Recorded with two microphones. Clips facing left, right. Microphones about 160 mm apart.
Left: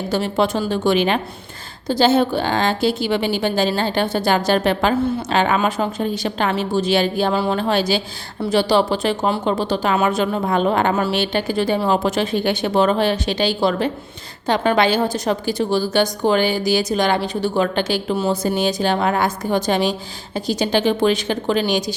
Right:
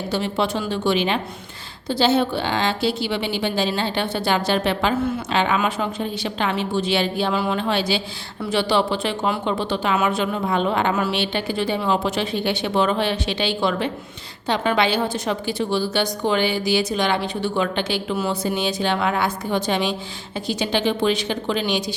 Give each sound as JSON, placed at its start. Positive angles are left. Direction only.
{"t": 0.1, "sound": "a woman's voice", "side_deg": 45}